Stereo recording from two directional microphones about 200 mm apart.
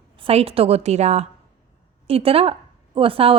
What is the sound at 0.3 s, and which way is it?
A woman's voice, 30° right (ahead or behind).